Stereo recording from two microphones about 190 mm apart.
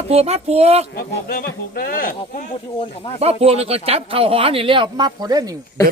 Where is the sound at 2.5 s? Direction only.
30° left (ahead or behind).